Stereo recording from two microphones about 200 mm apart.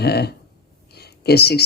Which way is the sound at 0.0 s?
55° left (ahead or behind).